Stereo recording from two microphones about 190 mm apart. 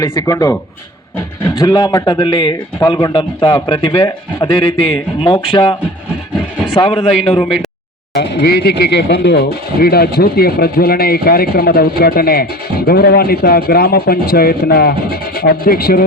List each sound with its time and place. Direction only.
0.2 s a man's voice: 15° left (ahead or behind)
6.7 s speech: 25° left (ahead or behind)
7.4 s speech: centre (ahead or behind)
8.1 s speech: 60° left (ahead or behind)